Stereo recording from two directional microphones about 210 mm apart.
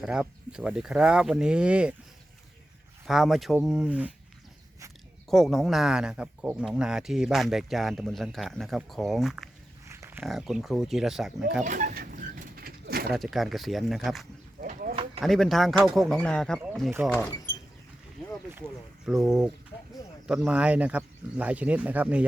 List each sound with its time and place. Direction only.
0.0 s speech: 5° right (ahead or behind)
3.1 s speech: centre (ahead or behind)
5.3 s speech: centre (ahead or behind)
9.8 s speech: 15° right (ahead or behind)
11.6 s a sound: 35° right (ahead or behind)
13.1 s speech: centre (ahead or behind)
14.6 s a sound: 40° right (ahead or behind)
15.2 s speech: centre (ahead or behind)
18.2 s boat: centre (ahead or behind)
19.0 s speech: centre (ahead or behind)